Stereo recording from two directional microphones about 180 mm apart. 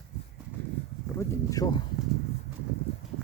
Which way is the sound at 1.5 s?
20° left (ahead or behind).